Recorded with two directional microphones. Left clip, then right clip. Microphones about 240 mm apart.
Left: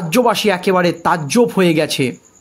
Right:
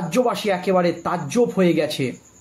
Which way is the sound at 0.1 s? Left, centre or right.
Left.